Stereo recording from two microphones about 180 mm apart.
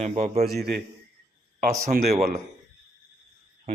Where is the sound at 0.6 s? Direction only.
65° right (ahead or behind).